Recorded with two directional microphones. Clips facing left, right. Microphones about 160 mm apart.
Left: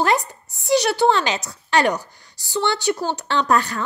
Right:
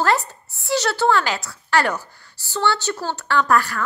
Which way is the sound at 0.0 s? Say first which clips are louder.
Even; 15° left (ahead or behind).